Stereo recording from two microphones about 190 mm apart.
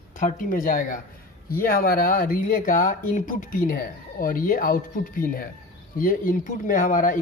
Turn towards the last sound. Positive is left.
turn(degrees=45)  # may be behind; listen again after turning